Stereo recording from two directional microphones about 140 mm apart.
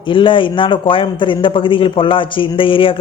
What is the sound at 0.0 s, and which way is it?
Speech, 35° left (ahead or behind).